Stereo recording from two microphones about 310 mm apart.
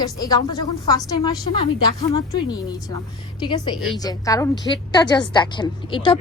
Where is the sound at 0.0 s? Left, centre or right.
Centre.